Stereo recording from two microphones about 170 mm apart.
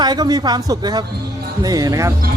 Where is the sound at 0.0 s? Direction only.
25° right (ahead or behind).